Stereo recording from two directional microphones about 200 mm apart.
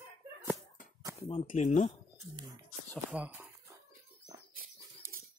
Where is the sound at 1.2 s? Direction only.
25° left (ahead or behind).